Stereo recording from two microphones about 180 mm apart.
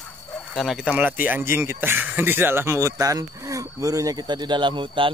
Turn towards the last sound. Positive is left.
turn(degrees=-25)  # may be behind; listen again after turning